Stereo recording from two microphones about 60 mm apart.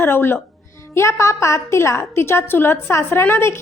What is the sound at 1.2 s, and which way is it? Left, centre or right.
A woman's voice, left.